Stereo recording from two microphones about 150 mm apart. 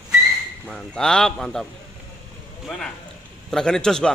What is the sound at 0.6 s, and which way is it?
A man's voice, 5° left (ahead or behind).